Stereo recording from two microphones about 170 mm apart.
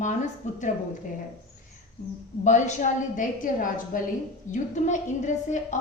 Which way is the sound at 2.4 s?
45° left (ahead or behind).